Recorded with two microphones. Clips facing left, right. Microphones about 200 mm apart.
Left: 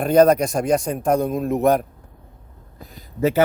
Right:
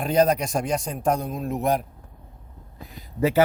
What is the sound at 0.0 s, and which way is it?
A man's voice, 55° left (ahead or behind).